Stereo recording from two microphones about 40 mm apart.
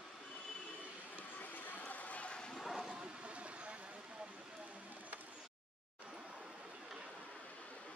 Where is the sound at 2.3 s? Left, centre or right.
Centre.